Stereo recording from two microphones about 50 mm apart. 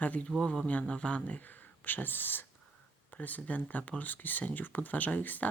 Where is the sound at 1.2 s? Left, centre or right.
Left.